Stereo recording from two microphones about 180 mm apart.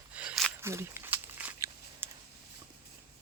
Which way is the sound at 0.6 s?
15° right (ahead or behind).